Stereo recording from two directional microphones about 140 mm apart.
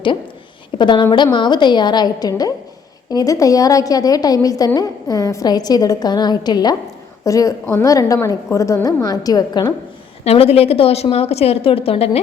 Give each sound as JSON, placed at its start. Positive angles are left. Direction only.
{"t": 0.8, "sound": "a woman's voice", "side_deg": 35}
{"t": 10.2, "sound": "a woman's voice", "side_deg": 45}